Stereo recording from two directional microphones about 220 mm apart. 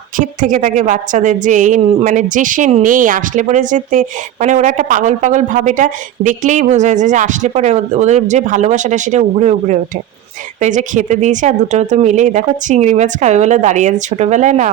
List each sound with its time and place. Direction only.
0.2 s a woman's voice: 35° right (ahead or behind)